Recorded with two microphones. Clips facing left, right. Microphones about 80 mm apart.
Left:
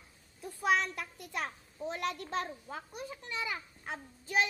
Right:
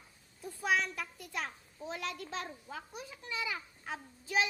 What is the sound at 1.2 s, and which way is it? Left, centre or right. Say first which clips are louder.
A child's voice: left 4 dB; left.